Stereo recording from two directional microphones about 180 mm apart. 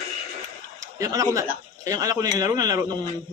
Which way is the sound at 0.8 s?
20° right (ahead or behind).